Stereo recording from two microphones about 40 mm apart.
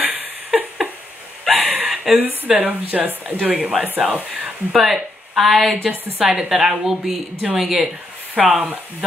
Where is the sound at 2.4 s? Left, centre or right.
Right.